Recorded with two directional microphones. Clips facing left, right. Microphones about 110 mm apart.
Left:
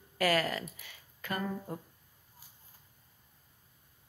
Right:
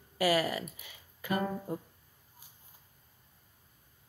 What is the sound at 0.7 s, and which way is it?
Typing, 10° right (ahead or behind).